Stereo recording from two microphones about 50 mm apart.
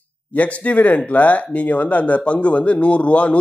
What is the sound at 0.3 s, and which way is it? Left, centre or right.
Speech, left.